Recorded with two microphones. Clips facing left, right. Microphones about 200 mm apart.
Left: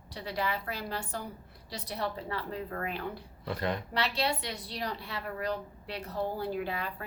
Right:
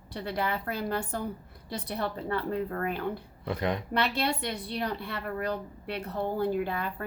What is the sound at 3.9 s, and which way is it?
A woman's voice, 55° right (ahead or behind).